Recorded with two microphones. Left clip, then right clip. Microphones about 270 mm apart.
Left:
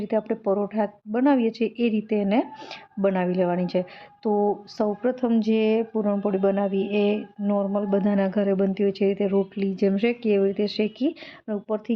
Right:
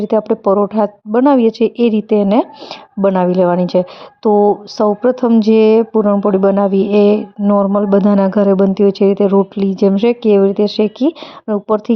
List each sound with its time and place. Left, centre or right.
0.0 s a woman's voice: right